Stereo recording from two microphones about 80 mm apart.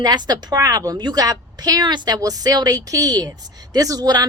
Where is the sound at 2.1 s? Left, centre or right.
Right.